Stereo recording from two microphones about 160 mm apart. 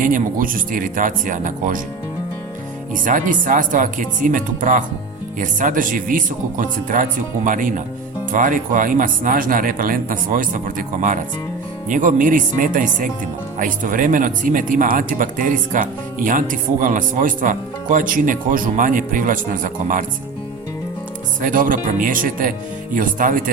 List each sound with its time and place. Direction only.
0.0 s speech: 60° right (ahead or behind)
2.9 s speech: 55° right (ahead or behind)
21.4 s speech: 60° right (ahead or behind)